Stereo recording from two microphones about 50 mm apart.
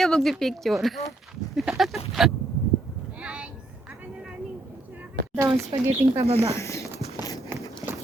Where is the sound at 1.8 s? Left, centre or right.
Centre.